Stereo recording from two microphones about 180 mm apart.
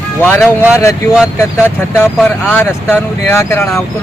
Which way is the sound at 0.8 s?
15° left (ahead or behind).